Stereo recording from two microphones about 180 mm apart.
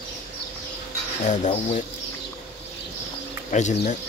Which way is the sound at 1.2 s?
40° left (ahead or behind).